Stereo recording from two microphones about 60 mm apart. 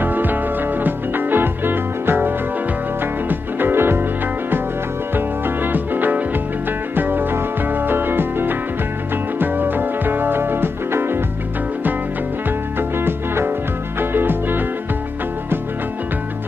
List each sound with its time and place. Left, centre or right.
0.0 s music: right
12.4 s music: right